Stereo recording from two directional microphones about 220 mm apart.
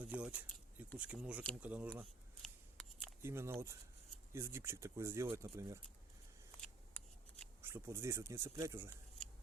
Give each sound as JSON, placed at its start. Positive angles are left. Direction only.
{"t": 0.0, "sound": "a sound", "side_deg": -5}
{"t": 0.9, "sound": "speech", "side_deg": -5}
{"t": 1.6, "sound": "shuffling cards", "side_deg": -5}
{"t": 3.2, "sound": "speech", "side_deg": -10}
{"t": 7.6, "sound": "speech", "side_deg": -10}